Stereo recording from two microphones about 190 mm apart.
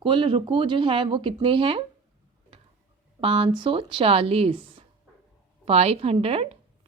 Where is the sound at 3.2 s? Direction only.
30° right (ahead or behind).